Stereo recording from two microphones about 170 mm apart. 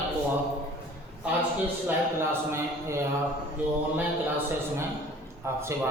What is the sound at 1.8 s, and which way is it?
Speech, 15° right (ahead or behind).